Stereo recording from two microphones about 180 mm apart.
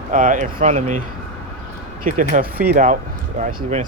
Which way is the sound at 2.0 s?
45° right (ahead or behind).